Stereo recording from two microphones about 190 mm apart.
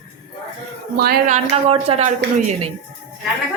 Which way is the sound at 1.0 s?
45° right (ahead or behind).